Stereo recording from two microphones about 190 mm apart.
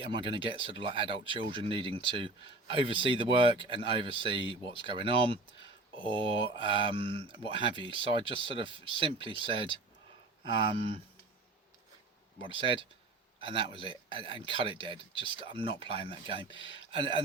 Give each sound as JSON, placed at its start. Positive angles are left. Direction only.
{"t": 0.0, "sound": "speech", "side_deg": -25}
{"t": 12.4, "sound": "speech", "side_deg": -30}